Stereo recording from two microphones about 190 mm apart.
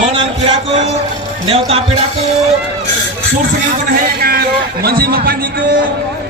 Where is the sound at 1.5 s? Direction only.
30° right (ahead or behind).